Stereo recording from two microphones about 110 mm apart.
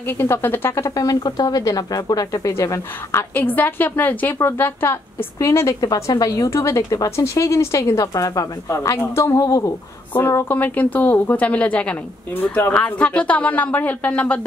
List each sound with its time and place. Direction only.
0.2 s speech: 20° left (ahead or behind)
10.1 s a woman's voice: 20° left (ahead or behind)